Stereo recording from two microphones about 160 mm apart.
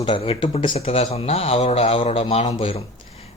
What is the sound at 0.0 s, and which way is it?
Speech, 35° left (ahead or behind).